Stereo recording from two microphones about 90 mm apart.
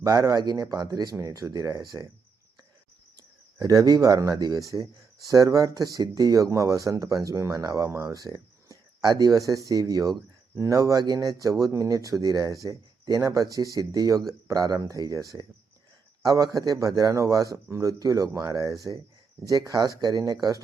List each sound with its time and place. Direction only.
0.0 s a man's voice: 45° right (ahead or behind)
3.6 s a man's voice: 40° right (ahead or behind)